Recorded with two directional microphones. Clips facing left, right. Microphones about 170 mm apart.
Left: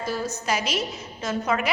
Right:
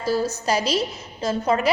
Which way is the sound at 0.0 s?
35° right (ahead or behind).